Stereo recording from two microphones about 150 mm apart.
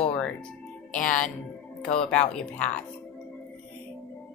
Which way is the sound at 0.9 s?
60° left (ahead or behind).